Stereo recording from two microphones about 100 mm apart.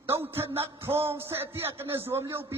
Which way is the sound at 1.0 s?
25° right (ahead or behind).